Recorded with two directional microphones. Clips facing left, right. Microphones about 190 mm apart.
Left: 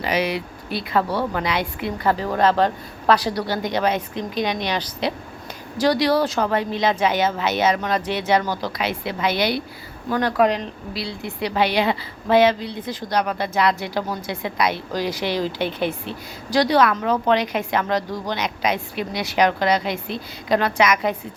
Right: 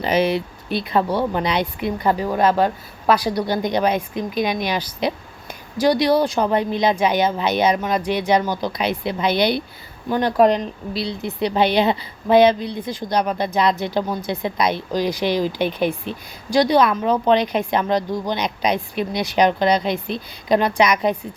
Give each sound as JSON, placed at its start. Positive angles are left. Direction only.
{"t": 0.0, "sound": "a woman's voice", "side_deg": -25}
{"t": 10.3, "sound": "speech", "side_deg": -45}
{"t": 10.9, "sound": "a woman's voice", "side_deg": -20}